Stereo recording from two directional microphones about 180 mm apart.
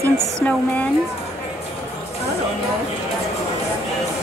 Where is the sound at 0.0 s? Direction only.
10° left (ahead or behind).